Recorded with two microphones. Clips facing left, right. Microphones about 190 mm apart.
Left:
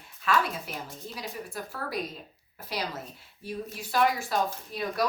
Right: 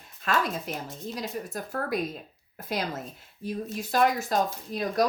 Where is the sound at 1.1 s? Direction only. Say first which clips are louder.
Right 4 dB; 40° right (ahead or behind).